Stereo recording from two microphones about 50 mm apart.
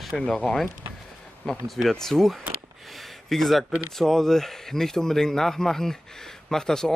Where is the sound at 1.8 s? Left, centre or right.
Centre.